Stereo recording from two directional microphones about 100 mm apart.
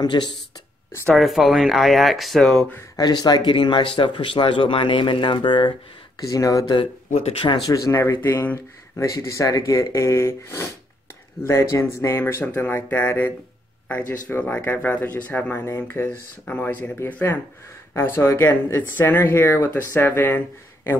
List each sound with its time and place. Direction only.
0.0 s speech: 50° left (ahead or behind)
1.1 s speech: centre (ahead or behind)
3.0 s speech: 45° left (ahead or behind)
6.1 s speech: 35° left (ahead or behind); by 21.0 s 20° left (ahead or behind)